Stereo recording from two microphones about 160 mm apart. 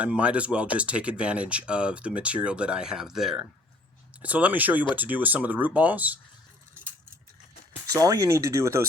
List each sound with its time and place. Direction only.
0.0 s speech: 10° right (ahead or behind)
7.9 s speech: 20° right (ahead or behind)